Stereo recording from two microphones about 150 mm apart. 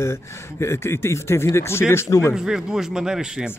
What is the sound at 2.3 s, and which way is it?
A man's voice, 5° right (ahead or behind).